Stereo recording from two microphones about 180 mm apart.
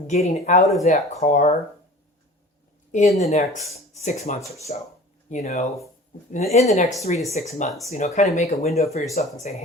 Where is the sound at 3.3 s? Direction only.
40° left (ahead or behind).